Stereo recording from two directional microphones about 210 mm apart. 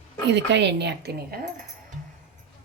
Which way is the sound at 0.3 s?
55° right (ahead or behind).